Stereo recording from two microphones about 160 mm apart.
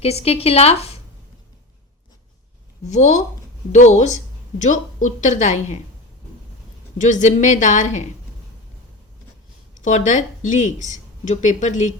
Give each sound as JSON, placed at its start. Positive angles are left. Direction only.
{"t": 0.0, "sound": "a woman's voice", "side_deg": 40}
{"t": 2.9, "sound": "speech", "side_deg": 45}
{"t": 7.0, "sound": "speech", "side_deg": 50}
{"t": 9.7, "sound": "speech", "side_deg": 50}